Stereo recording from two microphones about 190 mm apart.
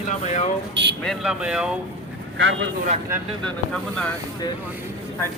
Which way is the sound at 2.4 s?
70° right (ahead or behind).